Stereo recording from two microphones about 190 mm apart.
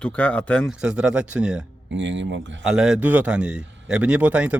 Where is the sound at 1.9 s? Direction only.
75° right (ahead or behind).